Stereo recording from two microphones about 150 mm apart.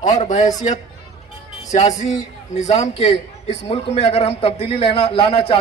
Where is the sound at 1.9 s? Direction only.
50° left (ahead or behind).